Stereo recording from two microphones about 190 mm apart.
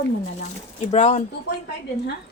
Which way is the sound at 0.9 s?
40° left (ahead or behind).